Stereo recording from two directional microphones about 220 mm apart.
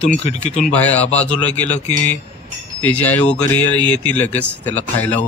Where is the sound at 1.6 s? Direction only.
30° left (ahead or behind).